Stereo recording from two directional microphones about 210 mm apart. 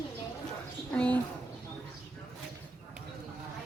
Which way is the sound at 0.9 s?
5° left (ahead or behind).